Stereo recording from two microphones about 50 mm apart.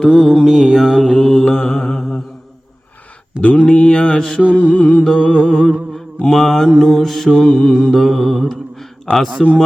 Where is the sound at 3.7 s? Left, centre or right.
Centre.